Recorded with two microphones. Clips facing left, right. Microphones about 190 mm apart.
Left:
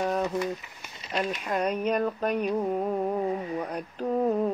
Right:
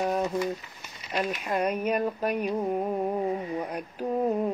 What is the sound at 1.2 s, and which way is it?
Mantra, 10° right (ahead or behind).